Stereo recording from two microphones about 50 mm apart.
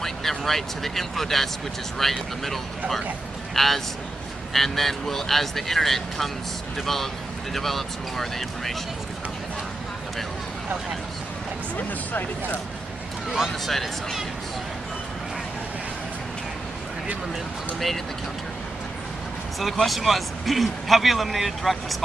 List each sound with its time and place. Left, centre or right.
0.0 s a man's voice: centre
7.5 s a man's voice: centre
11.7 s speech: left
13.5 s a man's voice: centre
17.7 s a man's voice: centre
19.6 s a man's voice: centre